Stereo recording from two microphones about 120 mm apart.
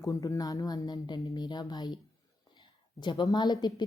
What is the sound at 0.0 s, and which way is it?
Speech, 30° left (ahead or behind).